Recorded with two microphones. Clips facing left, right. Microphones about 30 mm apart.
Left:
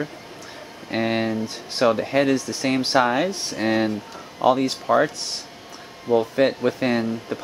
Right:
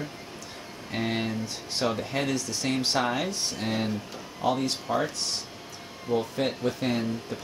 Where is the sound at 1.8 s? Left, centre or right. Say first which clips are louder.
Left 10 dB; left.